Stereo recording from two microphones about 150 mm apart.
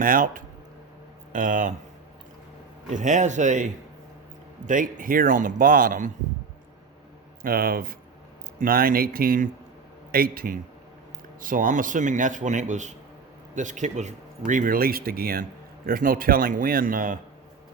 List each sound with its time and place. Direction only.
0.0 s a man's voice: 70° right (ahead or behind)
2.9 s a man's voice: 55° right (ahead or behind)
7.4 s a man's voice: 75° right (ahead or behind)